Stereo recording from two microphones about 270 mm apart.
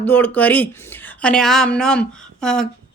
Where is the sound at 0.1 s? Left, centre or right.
Centre.